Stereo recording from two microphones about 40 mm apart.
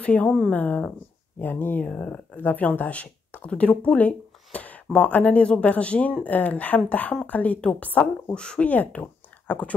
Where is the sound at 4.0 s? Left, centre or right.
Left.